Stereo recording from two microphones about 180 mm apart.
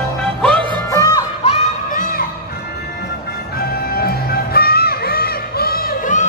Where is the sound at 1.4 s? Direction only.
40° left (ahead or behind).